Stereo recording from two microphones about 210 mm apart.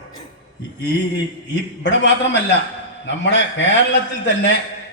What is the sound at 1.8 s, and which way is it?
A man's voice, 60° left (ahead or behind).